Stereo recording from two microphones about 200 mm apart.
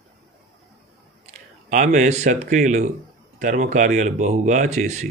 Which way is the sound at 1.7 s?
35° right (ahead or behind).